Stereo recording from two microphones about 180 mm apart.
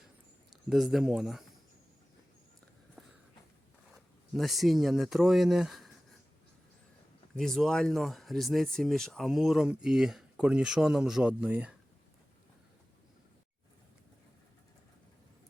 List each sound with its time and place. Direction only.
0.7 s speech: centre (ahead or behind)
3.9 s speech: centre (ahead or behind)
7.3 s speech: centre (ahead or behind)